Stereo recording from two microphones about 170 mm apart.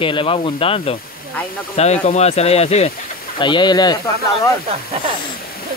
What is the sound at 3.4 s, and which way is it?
Speech, 25° left (ahead or behind).